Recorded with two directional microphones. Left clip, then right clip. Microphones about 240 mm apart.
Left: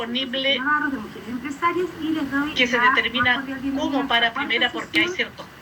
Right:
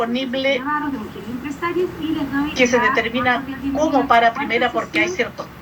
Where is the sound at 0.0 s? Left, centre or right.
Centre.